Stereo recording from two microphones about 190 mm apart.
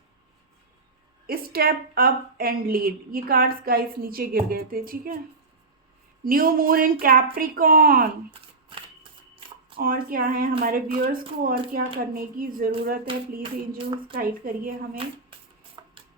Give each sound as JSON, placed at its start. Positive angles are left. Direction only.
{"t": 1.3, "sound": "a woman's voice", "side_deg": -50}
{"t": 6.2, "sound": "a woman's voice", "side_deg": -50}
{"t": 9.7, "sound": "a woman's voice", "side_deg": -50}
{"t": 13.1, "sound": "a sound", "side_deg": -25}
{"t": 14.2, "sound": "a woman's voice", "side_deg": -50}
{"t": 14.9, "sound": "a sound", "side_deg": -30}